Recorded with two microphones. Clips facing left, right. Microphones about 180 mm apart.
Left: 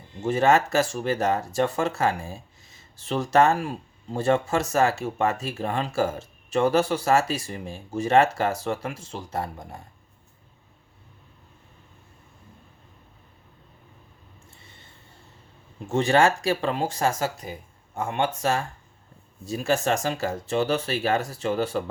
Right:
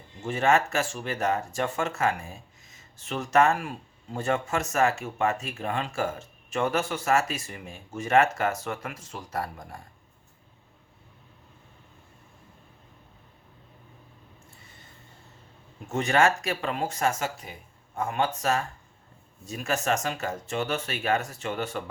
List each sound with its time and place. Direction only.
0.2 s speech: 40° left (ahead or behind)
15.9 s speech: 30° left (ahead or behind)